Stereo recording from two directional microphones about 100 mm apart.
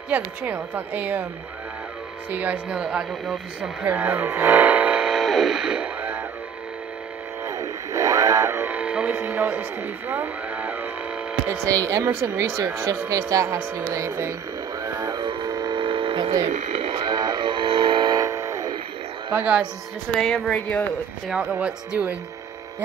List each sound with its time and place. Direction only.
0.1 s speech: 15° right (ahead or behind)
2.3 s speech: 15° right (ahead or behind)
3.8 s speech: 15° right (ahead or behind)
7.4 s radio: 30° right (ahead or behind); by 10.9 s 15° right (ahead or behind)
11.4 s speech: 30° right (ahead or behind)
14.8 s music: 35° right (ahead or behind)
15.2 s hum: 50° right (ahead or behind)
16.4 s speech: 65° right (ahead or behind); by 18.2 s 50° right (ahead or behind)
18.2 s guitar: 30° right (ahead or behind)
19.3 s speech: 15° right (ahead or behind)
20.2 s speech: 5° left (ahead or behind)
21.3 s speech: 10° right (ahead or behind)